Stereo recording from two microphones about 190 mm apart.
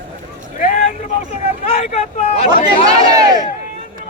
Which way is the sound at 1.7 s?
35° left (ahead or behind).